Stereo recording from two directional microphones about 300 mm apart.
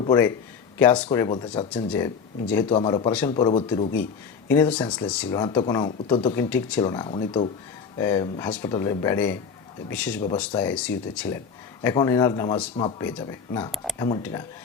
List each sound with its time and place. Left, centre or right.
0.0 s speech: centre
1.7 s speech: centre
6.5 s speech: centre
10.2 s speech: centre